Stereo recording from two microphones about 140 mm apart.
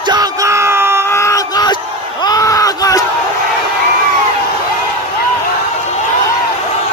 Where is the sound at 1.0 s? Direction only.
20° left (ahead or behind).